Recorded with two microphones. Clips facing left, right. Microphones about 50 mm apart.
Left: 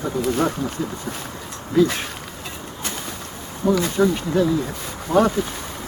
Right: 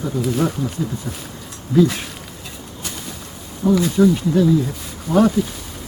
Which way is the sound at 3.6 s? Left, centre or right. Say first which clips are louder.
Right 3 dB; centre.